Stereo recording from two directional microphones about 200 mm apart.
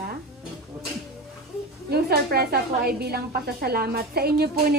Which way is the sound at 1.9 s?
50° right (ahead or behind).